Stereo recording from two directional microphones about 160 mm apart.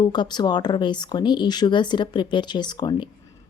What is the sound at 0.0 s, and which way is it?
Speech, 25° left (ahead or behind).